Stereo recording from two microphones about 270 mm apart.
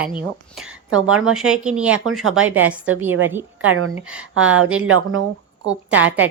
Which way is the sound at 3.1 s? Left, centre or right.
Right.